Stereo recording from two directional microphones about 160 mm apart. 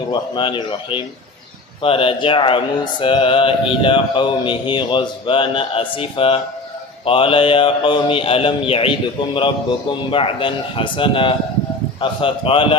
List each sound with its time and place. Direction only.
0.1 s speech: 30° left (ahead or behind)